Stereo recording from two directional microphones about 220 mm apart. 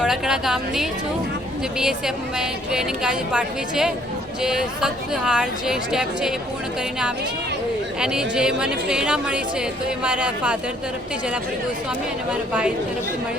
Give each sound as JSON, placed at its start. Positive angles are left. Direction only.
{"t": 0.0, "sound": "a woman's voice", "side_deg": 0}
{"t": 8.0, "sound": "a woman's voice", "side_deg": -5}